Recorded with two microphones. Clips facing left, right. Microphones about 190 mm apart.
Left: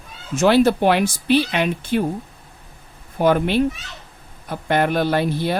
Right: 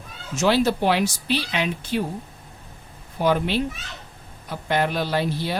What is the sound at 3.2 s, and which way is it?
Speech, 55° left (ahead or behind).